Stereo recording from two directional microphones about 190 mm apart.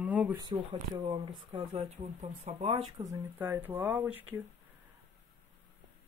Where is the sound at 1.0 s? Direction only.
25° right (ahead or behind).